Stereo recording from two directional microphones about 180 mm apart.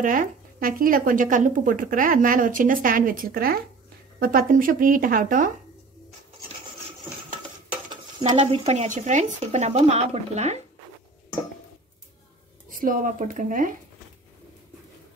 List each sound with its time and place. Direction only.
0.0 s speech: 50° right (ahead or behind)
8.2 s speech: 35° right (ahead or behind)
12.6 s speech: 50° right (ahead or behind)